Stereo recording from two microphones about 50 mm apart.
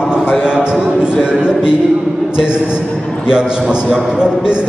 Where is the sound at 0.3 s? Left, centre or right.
Centre.